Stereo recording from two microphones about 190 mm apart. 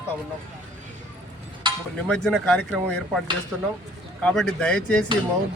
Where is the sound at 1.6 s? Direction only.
25° right (ahead or behind).